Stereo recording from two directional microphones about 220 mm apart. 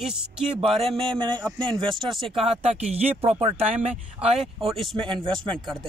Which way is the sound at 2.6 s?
30° right (ahead or behind).